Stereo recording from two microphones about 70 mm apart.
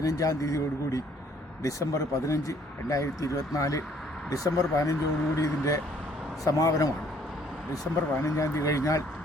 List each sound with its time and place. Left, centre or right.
0.0 s speech: left
8.2 s speech: left